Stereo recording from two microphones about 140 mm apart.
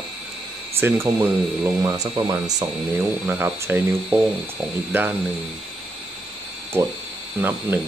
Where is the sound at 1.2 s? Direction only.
15° right (ahead or behind).